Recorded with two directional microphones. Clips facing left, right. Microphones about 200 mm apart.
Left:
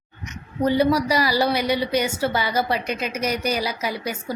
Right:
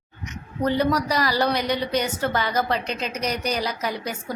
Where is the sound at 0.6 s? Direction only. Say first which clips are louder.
Left 3 dB; 10° left (ahead or behind).